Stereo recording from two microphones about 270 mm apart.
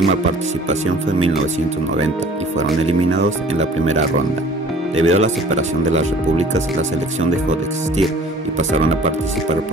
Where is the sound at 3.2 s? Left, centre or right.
Right.